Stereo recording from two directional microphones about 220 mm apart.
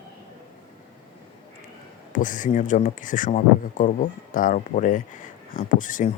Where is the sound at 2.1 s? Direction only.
35° left (ahead or behind).